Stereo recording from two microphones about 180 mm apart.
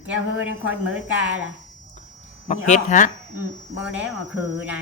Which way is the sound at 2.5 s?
45° left (ahead or behind).